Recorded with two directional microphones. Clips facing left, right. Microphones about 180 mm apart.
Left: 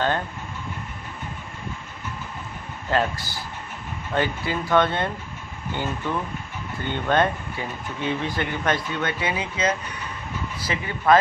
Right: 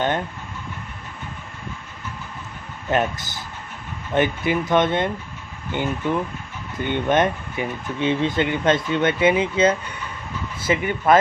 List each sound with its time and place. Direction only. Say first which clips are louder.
2.9 s speech: right 2 dB; 20° right (ahead or behind)